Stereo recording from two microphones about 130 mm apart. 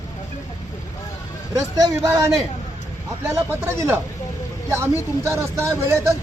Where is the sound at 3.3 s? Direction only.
20° right (ahead or behind).